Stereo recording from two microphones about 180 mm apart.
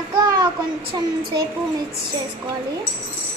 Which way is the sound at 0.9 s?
20° right (ahead or behind).